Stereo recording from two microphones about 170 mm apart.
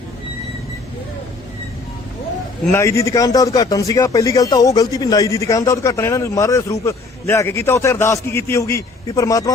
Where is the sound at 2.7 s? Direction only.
15° left (ahead or behind).